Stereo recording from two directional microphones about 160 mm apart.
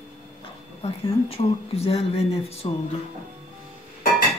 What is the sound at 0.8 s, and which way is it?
Speech, 40° left (ahead or behind).